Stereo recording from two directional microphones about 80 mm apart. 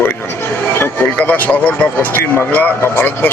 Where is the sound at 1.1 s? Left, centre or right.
Centre.